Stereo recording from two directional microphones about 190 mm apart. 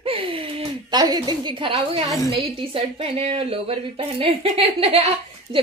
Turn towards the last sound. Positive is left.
turn(degrees=-30)  # may be behind; listen again after turning